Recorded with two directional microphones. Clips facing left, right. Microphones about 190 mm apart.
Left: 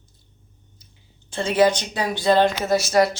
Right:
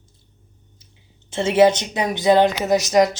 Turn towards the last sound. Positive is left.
turn(degrees=-15)  # may be behind; listen again after turning